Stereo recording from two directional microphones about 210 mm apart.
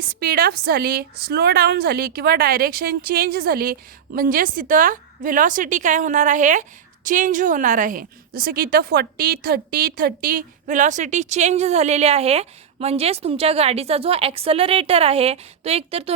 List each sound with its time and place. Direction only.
0.2 s a woman's voice: 45° right (ahead or behind); by 16.1 s 30° right (ahead or behind)